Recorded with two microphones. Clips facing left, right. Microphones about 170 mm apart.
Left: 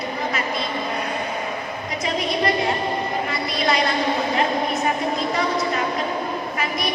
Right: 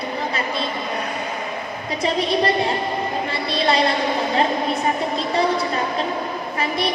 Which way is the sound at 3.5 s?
30° right (ahead or behind).